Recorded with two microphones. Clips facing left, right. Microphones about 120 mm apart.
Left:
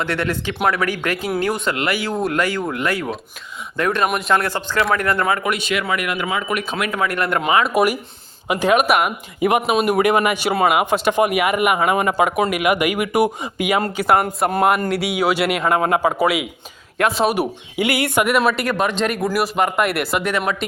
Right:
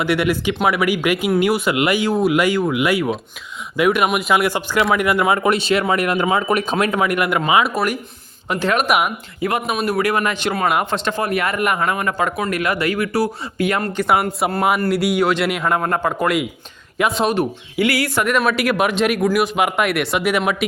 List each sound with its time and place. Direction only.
0.0 s speech: 10° right (ahead or behind)
2.1 s a man's voice: 5° right (ahead or behind)
2.4 s speech: 15° right (ahead or behind)
5.4 s speech: 30° right (ahead or behind)
6.9 s speech: 20° right (ahead or behind)
7.7 s speech: 10° left (ahead or behind)
8.9 s a man's voice: centre (ahead or behind)
9.4 s a man's voice: 15° left (ahead or behind)
18.5 s a man's voice: 5° right (ahead or behind)
20.3 s speech: 10° right (ahead or behind)